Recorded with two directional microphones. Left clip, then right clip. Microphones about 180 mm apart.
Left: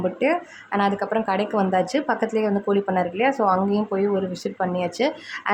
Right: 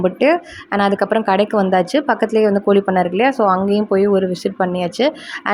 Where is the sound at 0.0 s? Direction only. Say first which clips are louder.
Right 7 dB; 30° right (ahead or behind).